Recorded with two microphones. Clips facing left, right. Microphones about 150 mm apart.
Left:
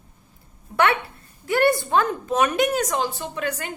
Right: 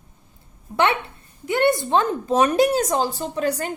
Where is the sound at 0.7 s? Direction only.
20° right (ahead or behind).